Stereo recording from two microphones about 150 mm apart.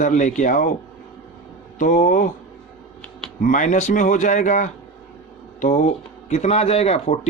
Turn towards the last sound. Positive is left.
turn(degrees=45)  # may be behind; listen again after turning